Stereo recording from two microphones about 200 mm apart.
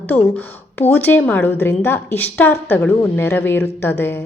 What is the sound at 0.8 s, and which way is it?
A woman's voice, 10° left (ahead or behind).